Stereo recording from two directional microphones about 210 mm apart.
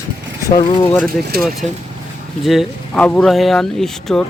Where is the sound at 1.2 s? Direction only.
45° right (ahead or behind).